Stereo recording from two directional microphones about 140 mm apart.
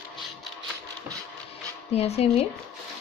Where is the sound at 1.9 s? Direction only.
45° left (ahead or behind).